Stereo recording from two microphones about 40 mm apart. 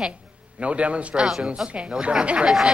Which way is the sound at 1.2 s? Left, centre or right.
Centre.